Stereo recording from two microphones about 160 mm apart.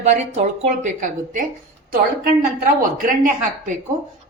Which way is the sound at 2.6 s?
55° right (ahead or behind).